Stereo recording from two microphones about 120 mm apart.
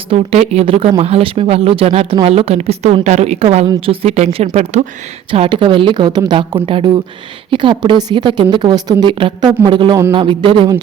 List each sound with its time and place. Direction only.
0.1 s a woman's voice: 55° right (ahead or behind)
5.3 s a woman's voice: 45° right (ahead or behind)